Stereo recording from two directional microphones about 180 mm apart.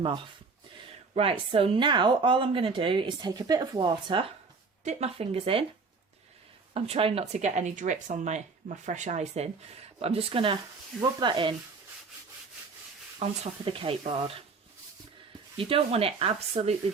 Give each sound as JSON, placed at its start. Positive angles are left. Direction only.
{"t": 1.1, "sound": "speech", "side_deg": -30}
{"t": 4.8, "sound": "speech", "side_deg": -40}
{"t": 6.7, "sound": "speech", "side_deg": -35}
{"t": 13.1, "sound": "speech", "side_deg": -35}
{"t": 15.5, "sound": "speech", "side_deg": -30}